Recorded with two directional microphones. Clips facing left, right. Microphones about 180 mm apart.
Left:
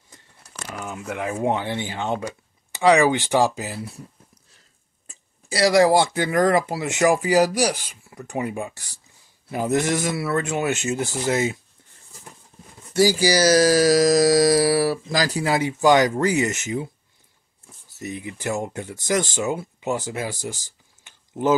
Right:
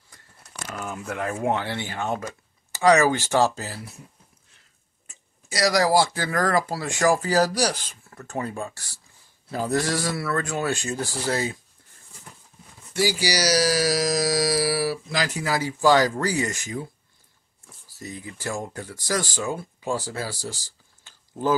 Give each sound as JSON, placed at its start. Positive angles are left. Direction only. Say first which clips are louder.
{"t": 0.1, "sound": "a sound", "louder": "left 1 dB", "side_deg": 15}
{"t": 1.4, "sound": "speech", "louder": "left 3 dB", "side_deg": 15}
{"t": 4.5, "sound": "speech", "louder": "left 3 dB", "side_deg": 35}
{"t": 12.9, "sound": "speech", "louder": "left 6 dB", "side_deg": 45}